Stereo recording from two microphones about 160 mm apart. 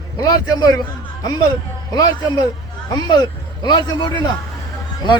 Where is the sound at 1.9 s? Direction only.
25° left (ahead or behind).